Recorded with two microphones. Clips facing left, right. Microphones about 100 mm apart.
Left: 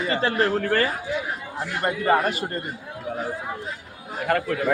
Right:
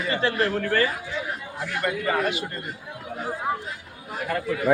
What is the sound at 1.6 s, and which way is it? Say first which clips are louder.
A man's voice: left 1 dB; 30° left (ahead or behind).